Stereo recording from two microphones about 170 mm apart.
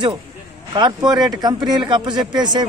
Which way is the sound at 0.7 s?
25° right (ahead or behind).